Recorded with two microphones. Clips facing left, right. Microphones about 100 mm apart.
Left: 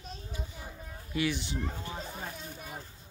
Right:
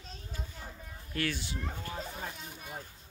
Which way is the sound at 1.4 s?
25° left (ahead or behind).